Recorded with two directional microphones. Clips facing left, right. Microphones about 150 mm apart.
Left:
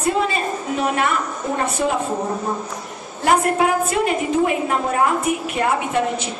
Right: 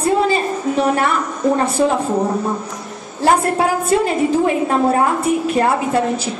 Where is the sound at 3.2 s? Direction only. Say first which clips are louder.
Right 2 dB; 30° right (ahead or behind).